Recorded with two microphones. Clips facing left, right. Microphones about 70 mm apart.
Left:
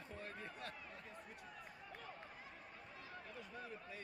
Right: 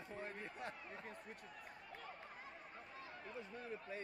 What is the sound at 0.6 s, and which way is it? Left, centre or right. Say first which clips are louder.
Speech: right 2 dB; right.